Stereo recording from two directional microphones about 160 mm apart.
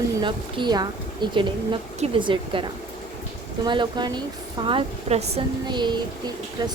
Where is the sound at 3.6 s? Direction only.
30° right (ahead or behind).